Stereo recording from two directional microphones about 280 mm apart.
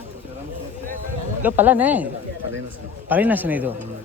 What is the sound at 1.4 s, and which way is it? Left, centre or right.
A man's voice, centre.